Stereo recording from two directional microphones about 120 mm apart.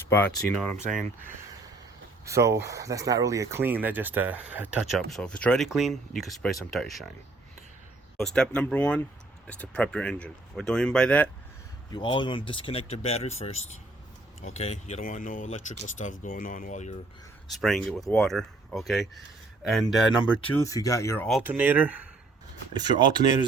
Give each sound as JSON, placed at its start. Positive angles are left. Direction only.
{"t": 0.1, "sound": "speech", "side_deg": 10}
{"t": 2.2, "sound": "speech", "side_deg": -25}
{"t": 3.6, "sound": "speech", "side_deg": -15}
{"t": 4.9, "sound": "speech", "side_deg": 0}
{"t": 8.2, "sound": "speech", "side_deg": 5}
{"t": 11.9, "sound": "speech", "side_deg": 40}
{"t": 17.5, "sound": "speech", "side_deg": 0}
{"t": 20.5, "sound": "speech", "side_deg": 25}
{"t": 21.4, "sound": "speech", "side_deg": -15}
{"t": 22.7, "sound": "speech", "side_deg": -35}